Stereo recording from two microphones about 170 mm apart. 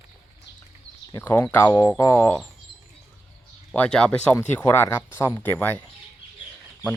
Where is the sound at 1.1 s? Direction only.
15° left (ahead or behind).